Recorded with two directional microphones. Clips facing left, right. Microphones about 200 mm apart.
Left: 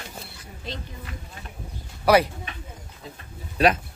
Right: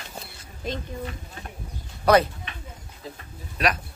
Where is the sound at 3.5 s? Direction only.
30° left (ahead or behind).